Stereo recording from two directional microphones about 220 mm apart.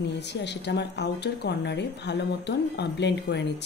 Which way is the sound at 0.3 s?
50° left (ahead or behind).